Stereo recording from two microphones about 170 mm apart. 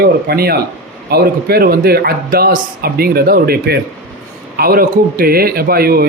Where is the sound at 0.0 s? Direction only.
65° right (ahead or behind).